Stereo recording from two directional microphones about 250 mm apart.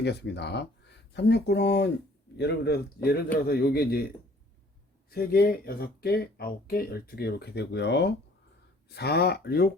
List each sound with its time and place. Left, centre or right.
0.0 s speech: left
5.1 s speech: left